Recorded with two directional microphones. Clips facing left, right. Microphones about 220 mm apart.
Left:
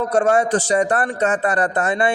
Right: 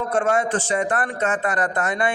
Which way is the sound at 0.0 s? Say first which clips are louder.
Left 4 dB; 40° left (ahead or behind).